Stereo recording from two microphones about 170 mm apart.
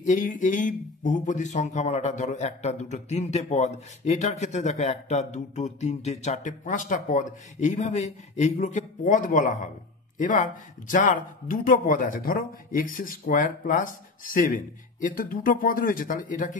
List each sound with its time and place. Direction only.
0.0 s speech: 45° left (ahead or behind)